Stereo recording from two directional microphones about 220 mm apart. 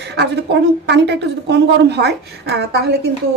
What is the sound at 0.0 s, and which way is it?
A woman's voice, 50° right (ahead or behind).